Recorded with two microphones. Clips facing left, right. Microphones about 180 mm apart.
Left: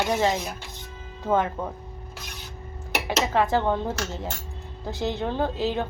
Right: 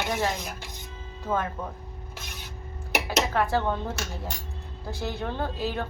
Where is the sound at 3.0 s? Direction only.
20° left (ahead or behind).